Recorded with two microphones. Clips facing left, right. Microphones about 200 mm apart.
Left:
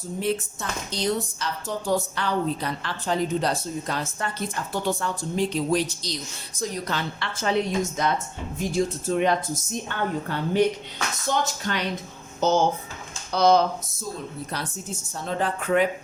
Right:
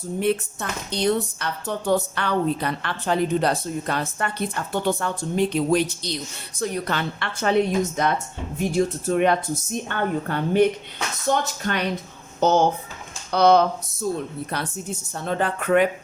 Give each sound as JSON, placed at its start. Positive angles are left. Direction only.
{"t": 0.2, "sound": "a woman's voice", "side_deg": -60}